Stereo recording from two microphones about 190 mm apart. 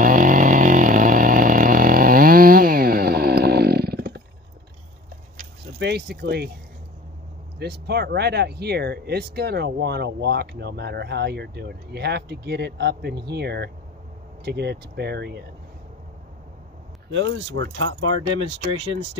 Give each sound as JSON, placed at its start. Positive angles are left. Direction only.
{"t": 0.0, "sound": "chainsaw", "side_deg": -45}
{"t": 5.8, "sound": "speech", "side_deg": -60}
{"t": 7.5, "sound": "speech", "side_deg": -60}
{"t": 17.1, "sound": "speech", "side_deg": -75}